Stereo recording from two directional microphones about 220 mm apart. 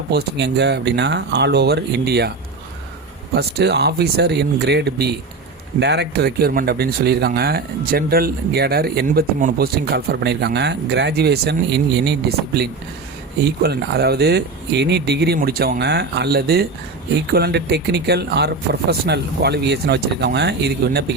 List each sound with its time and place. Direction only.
0.1 s speech: 50° right (ahead or behind)
3.3 s speech: 50° right (ahead or behind)
13.4 s speech: 45° right (ahead or behind)